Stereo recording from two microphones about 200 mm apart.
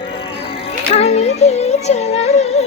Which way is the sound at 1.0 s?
30° left (ahead or behind).